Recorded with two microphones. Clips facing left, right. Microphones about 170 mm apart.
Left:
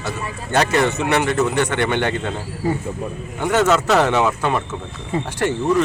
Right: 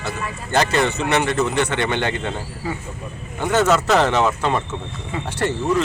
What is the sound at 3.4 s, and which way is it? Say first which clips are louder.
Speech: left 1 dB; 5° right (ahead or behind).